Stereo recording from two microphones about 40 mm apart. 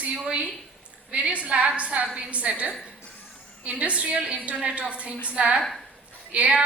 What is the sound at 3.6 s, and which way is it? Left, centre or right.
A woman's voice, right.